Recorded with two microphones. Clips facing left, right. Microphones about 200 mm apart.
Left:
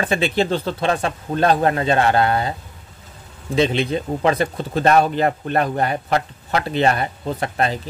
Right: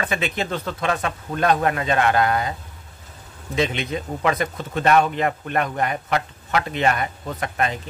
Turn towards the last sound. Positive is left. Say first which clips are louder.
# left 3 dB
turn(degrees=30)  # may be behind; listen again after turning